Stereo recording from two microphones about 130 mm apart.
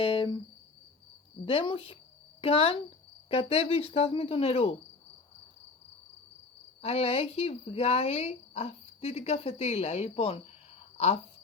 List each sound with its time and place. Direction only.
0.0 s cricket: 45° left (ahead or behind)
1.5 s speech: 45° left (ahead or behind)
6.8 s speech: 50° left (ahead or behind)